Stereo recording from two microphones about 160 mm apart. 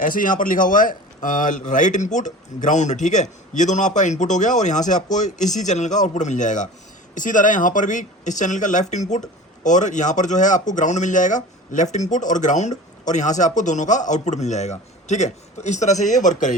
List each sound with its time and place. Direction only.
0.0 s speech: 60° left (ahead or behind)